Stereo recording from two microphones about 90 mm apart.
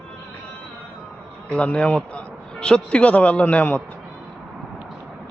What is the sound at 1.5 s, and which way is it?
A man's voice, 15° left (ahead or behind).